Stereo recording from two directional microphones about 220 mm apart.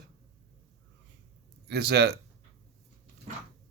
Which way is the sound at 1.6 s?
45° right (ahead or behind).